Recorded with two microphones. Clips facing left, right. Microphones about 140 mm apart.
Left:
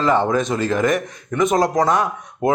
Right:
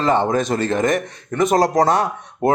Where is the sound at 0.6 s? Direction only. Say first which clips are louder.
Even; 25° right (ahead or behind).